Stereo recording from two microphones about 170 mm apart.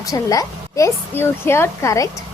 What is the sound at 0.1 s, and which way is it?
Speech, 20° left (ahead or behind).